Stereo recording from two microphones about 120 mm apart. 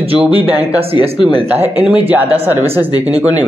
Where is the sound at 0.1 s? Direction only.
50° right (ahead or behind).